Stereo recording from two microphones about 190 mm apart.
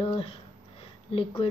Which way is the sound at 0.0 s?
25° left (ahead or behind).